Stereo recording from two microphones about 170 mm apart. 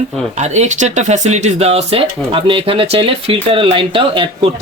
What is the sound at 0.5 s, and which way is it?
Speech, 45° right (ahead or behind).